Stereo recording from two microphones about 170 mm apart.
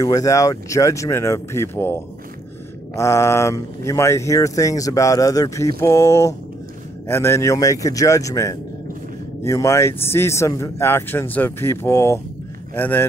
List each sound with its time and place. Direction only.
0.0 s speech: 20° left (ahead or behind)